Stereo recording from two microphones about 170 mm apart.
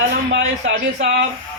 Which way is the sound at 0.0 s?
90° right.